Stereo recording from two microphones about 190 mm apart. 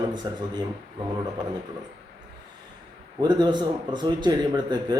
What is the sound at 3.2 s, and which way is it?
A man's voice, 25° right (ahead or behind).